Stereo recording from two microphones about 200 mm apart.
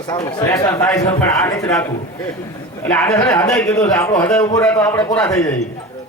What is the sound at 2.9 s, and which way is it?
A man's voice, 10° left (ahead or behind).